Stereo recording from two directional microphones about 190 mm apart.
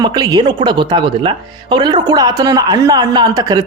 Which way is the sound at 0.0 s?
20° right (ahead or behind).